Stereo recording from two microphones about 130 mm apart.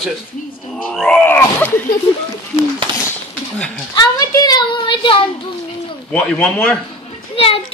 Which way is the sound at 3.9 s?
30° left (ahead or behind).